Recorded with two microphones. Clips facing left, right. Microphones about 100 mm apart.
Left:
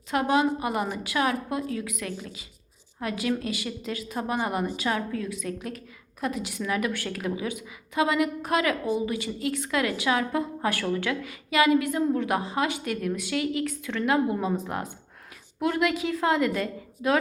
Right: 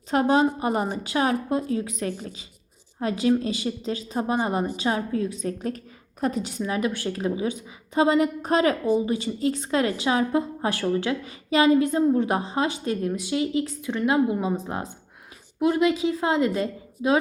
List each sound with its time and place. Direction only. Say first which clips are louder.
0.1 s a woman's voice: right 3 dB; 35° right (ahead or behind)